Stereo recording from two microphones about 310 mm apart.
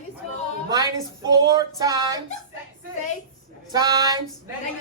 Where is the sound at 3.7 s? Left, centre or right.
Centre.